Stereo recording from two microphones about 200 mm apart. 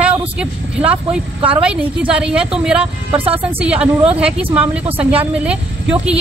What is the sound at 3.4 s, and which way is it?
A woman's voice, 5° right (ahead or behind).